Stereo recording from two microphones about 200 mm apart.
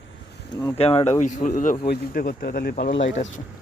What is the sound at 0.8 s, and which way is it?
Speech, 30° left (ahead or behind).